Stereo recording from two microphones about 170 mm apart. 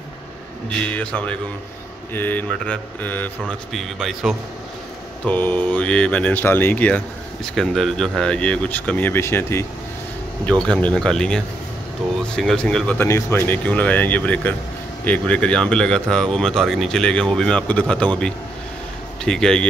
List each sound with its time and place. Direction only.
0.7 s speech: 5° left (ahead or behind)
5.2 s speech: 10° left (ahead or behind)
19.2 s speech: 5° left (ahead or behind)